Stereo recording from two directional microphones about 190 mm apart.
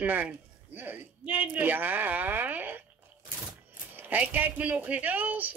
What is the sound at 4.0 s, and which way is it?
Speech, 10° right (ahead or behind).